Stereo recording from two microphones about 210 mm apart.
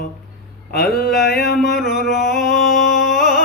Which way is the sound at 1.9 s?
Centre (ahead or behind).